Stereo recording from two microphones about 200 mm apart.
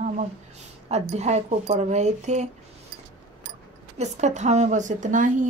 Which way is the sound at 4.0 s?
35° right (ahead or behind).